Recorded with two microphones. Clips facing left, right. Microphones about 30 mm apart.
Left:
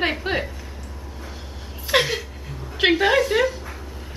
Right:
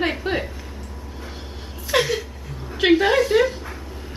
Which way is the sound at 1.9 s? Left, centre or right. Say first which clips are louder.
Even; centre.